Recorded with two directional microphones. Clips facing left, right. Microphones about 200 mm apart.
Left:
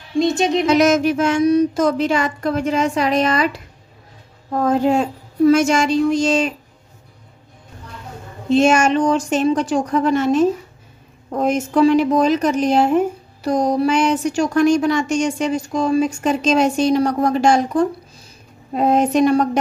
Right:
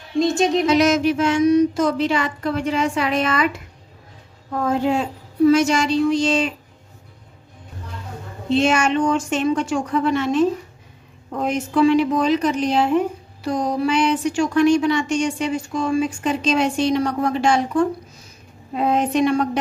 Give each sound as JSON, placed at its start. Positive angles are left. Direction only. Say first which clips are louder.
{"t": 0.2, "sound": "a sound", "louder": "left 1 dB", "side_deg": 0}
{"t": 0.7, "sound": "a woman's voice", "louder": "left 4 dB", "side_deg": 50}
{"t": 8.5, "sound": "a woman's voice", "louder": "left 4 dB", "side_deg": 45}